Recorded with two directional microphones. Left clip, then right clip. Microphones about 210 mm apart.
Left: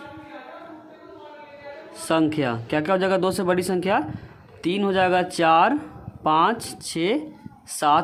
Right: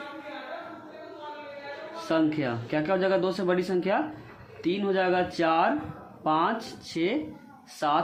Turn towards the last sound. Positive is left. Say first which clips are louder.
# left 7 dB
turn(degrees=40)  # may be behind; listen again after turning